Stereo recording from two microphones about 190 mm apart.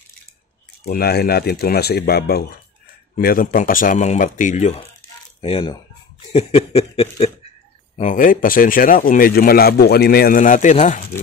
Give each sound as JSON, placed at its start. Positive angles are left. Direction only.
{"t": 0.8, "sound": "speech", "side_deg": 55}
{"t": 6.3, "sound": "snicker", "side_deg": 30}
{"t": 8.0, "sound": "speech", "side_deg": 45}